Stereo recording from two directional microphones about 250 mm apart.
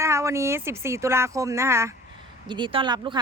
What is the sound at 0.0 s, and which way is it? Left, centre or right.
Speech, centre.